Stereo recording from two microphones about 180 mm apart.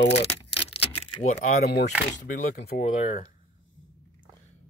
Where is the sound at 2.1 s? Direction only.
45° left (ahead or behind).